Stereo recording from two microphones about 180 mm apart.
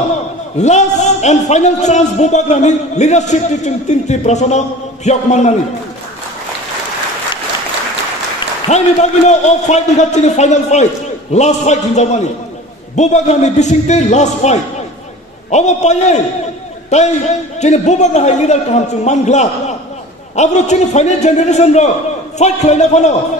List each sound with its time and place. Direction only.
0.6 s a man's voice: 40° left (ahead or behind)
8.6 s a man's voice: 40° left (ahead or behind)
17.6 s a man's voice: 40° left (ahead or behind)